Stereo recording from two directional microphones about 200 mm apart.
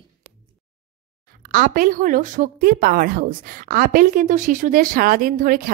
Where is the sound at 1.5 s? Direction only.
45° right (ahead or behind).